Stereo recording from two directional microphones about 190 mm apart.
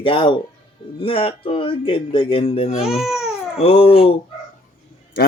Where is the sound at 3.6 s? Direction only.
30° left (ahead or behind).